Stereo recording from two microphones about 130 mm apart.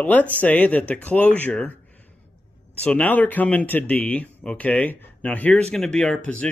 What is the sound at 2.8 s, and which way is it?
Speech, 10° left (ahead or behind).